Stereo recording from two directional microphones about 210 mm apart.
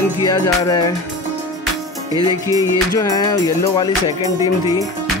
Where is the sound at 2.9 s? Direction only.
15° left (ahead or behind).